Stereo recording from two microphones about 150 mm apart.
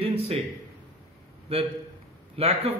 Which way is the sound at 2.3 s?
40° right (ahead or behind).